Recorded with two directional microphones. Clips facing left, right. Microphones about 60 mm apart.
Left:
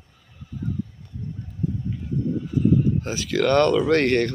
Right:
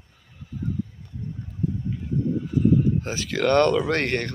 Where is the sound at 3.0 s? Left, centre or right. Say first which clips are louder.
Left 2 dB; right.